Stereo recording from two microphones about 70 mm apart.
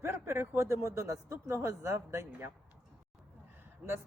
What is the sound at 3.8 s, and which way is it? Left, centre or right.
Speech, right.